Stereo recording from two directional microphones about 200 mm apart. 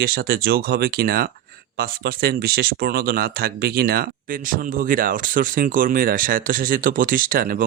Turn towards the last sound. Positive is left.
turn(degrees=-45)  # may be behind; listen again after turning